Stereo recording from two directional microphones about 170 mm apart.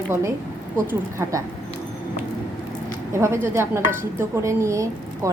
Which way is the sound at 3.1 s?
15° right (ahead or behind).